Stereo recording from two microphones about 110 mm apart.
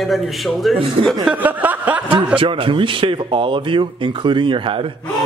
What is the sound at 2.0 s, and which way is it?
A man's voice, 50° right (ahead or behind).